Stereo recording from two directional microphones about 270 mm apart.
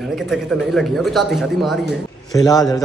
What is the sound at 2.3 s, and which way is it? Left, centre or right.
Speech, centre.